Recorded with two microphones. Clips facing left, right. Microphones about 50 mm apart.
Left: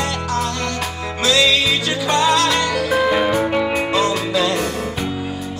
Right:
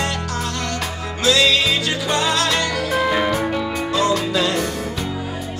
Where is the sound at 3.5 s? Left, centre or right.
Left.